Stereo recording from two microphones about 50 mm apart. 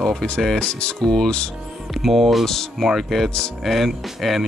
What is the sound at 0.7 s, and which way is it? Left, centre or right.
Speech, centre.